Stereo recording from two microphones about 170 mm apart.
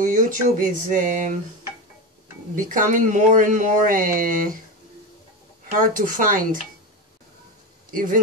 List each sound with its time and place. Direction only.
0.0 s speech: 50° right (ahead or behind)
2.5 s speech: 50° right (ahead or behind)
5.7 s speech: 50° right (ahead or behind)
7.9 s speech: 55° right (ahead or behind)